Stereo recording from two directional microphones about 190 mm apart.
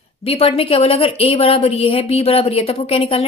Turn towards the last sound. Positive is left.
turn(degrees=30)  # may be behind; listen again after turning